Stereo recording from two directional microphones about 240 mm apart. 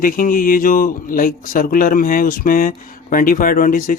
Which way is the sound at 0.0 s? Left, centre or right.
Left.